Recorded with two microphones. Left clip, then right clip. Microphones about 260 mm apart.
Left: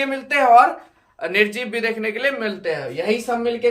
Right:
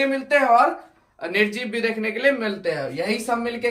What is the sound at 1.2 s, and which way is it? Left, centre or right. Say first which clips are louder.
Speech: left 3 dB; centre.